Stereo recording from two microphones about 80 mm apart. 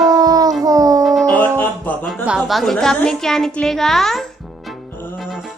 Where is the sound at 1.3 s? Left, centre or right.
Left.